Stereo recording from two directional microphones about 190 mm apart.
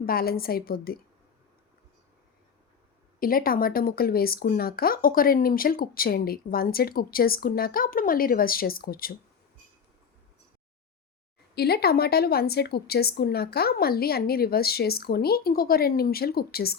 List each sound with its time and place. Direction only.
0.0 s speech: 50° left (ahead or behind)
3.2 s speech: 50° left (ahead or behind)
11.5 s a woman's voice: 55° left (ahead or behind)